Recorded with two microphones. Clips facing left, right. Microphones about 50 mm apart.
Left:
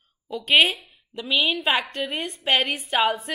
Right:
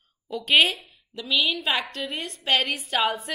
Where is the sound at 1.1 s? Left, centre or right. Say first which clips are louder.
Left 1 dB; centre.